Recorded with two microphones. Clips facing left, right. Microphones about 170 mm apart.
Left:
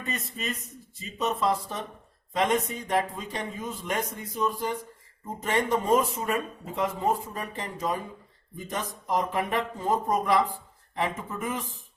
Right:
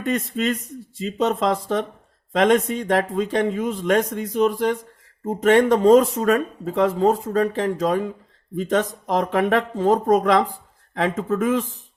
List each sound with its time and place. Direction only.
0.0 s speech: 90° right